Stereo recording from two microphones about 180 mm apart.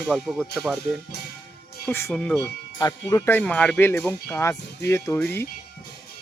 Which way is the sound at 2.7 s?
20° left (ahead or behind).